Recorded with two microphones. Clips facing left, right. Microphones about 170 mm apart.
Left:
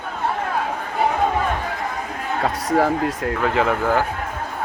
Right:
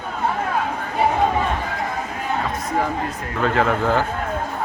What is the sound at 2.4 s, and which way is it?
Speech, 80° left.